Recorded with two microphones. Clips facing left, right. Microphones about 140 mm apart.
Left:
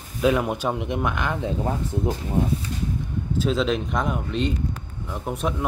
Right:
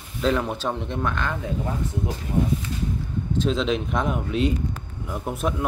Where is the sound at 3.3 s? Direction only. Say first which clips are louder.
Even; 5° left (ahead or behind).